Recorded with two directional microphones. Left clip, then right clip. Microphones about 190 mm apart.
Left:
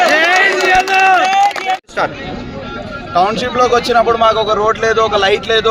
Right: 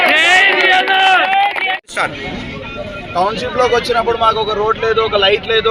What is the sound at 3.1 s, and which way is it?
A man's voice, 15° left (ahead or behind).